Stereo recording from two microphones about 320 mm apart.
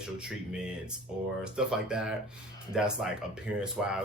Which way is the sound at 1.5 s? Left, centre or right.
Centre.